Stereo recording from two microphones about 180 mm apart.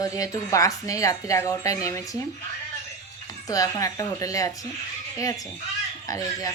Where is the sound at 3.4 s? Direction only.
20° left (ahead or behind).